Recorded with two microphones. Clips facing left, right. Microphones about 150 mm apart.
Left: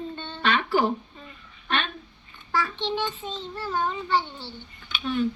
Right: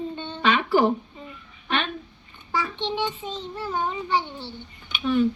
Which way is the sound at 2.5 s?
20° right (ahead or behind).